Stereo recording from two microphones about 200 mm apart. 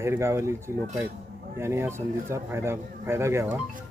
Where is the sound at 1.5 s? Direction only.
15° right (ahead or behind).